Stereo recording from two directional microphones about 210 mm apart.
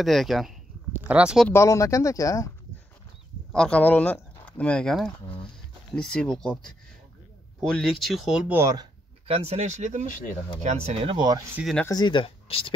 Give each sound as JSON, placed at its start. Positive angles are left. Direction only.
{"t": 0.0, "sound": "speech", "side_deg": 0}
{"t": 1.5, "sound": "speech", "side_deg": 15}
{"t": 3.5, "sound": "speech", "side_deg": 5}
{"t": 9.3, "sound": "speech", "side_deg": -30}
{"t": 10.0, "sound": "speech", "side_deg": 40}
{"t": 10.6, "sound": "speech", "side_deg": -35}
{"t": 11.1, "sound": "speech", "side_deg": -20}
{"t": 11.5, "sound": "speech", "side_deg": 0}
{"t": 11.8, "sound": "speech", "side_deg": 20}